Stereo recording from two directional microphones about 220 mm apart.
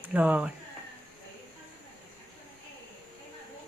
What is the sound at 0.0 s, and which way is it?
Speech, 5° right (ahead or behind).